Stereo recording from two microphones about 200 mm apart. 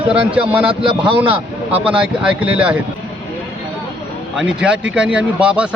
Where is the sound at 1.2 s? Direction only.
10° right (ahead or behind).